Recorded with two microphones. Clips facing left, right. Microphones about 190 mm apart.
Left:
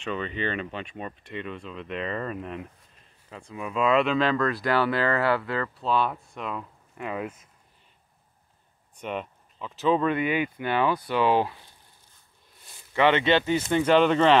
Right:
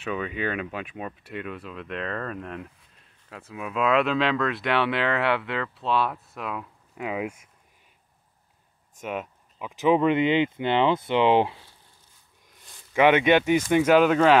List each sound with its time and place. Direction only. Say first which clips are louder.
0.0 s speech: right 1 dB; 5° right (ahead or behind)
9.0 s speech: right 1 dB; 5° right (ahead or behind)